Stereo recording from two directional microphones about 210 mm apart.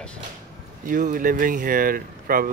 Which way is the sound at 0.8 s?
40° right (ahead or behind).